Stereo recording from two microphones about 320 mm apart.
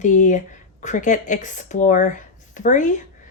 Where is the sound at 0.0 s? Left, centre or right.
Left.